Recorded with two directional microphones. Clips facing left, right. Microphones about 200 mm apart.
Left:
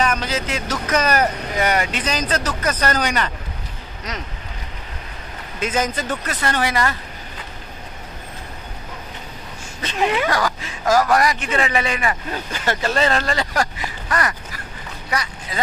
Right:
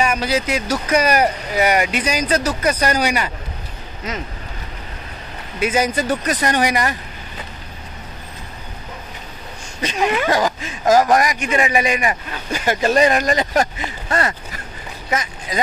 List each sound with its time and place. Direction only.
0.0 s speech: 10° right (ahead or behind)
5.6 s speech: 10° right (ahead or behind)
10.2 s speech: 20° right (ahead or behind)